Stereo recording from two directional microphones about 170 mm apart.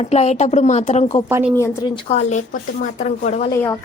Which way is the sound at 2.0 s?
40° left (ahead or behind).